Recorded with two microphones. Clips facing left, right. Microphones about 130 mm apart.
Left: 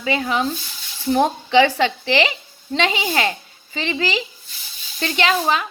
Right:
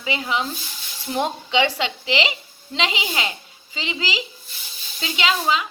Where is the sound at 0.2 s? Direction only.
45° left (ahead or behind).